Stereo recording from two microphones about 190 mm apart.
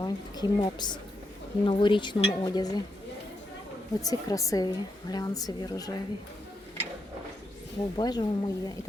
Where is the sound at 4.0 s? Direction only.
20° left (ahead or behind).